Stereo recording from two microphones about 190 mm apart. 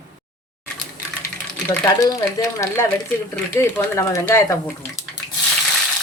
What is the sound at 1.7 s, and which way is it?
Speech, 20° left (ahead or behind).